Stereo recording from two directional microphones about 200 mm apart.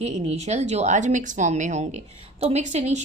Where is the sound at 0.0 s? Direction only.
35° right (ahead or behind).